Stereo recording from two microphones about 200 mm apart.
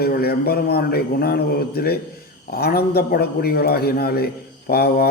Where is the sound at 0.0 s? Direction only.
50° left (ahead or behind).